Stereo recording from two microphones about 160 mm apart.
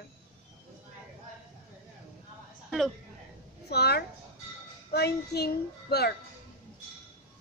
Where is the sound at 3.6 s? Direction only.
90° left.